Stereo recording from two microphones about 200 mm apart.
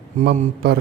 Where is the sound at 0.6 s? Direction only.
55° right (ahead or behind).